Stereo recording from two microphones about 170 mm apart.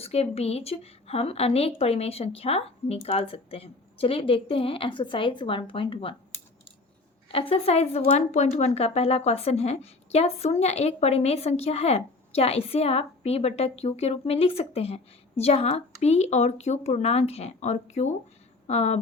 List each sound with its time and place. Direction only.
0.0 s speech: 35° left (ahead or behind)
7.3 s speech: 35° left (ahead or behind)